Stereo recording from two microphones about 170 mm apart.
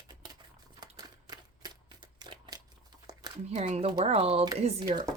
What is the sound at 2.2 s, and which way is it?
Crumpling, 25° right (ahead or behind).